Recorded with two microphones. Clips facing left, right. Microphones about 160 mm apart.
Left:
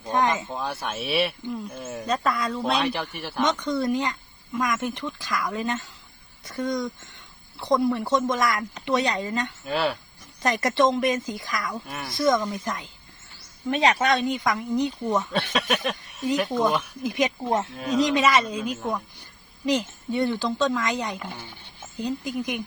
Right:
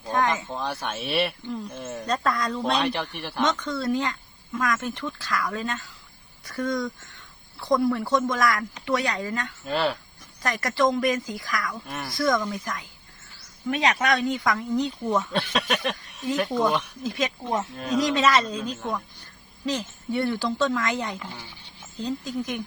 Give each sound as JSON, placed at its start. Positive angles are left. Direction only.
{"t": 0.1, "sound": "a sound", "side_deg": 20}
{"t": 0.4, "sound": "speech", "side_deg": 0}
{"t": 3.4, "sound": "speech", "side_deg": 15}
{"t": 9.6, "sound": "speech", "side_deg": 0}
{"t": 10.4, "sound": "speech", "side_deg": 20}
{"t": 11.9, "sound": "speech", "side_deg": 0}
{"t": 12.1, "sound": "speech", "side_deg": 20}
{"t": 15.3, "sound": "speech", "side_deg": 0}
{"t": 17.0, "sound": "speech", "side_deg": 15}
{"t": 17.7, "sound": "speech", "side_deg": 0}
{"t": 18.0, "sound": "a woman's voice", "side_deg": 15}